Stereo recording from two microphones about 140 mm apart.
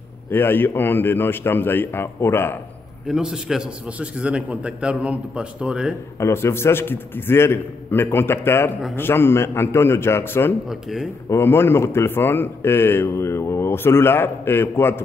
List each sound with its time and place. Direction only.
0.3 s speech: 15° left (ahead or behind)
3.1 s a man's voice: 5° right (ahead or behind)
6.1 s speech: 20° left (ahead or behind)
10.7 s speech: centre (ahead or behind)
11.2 s speech: 15° left (ahead or behind)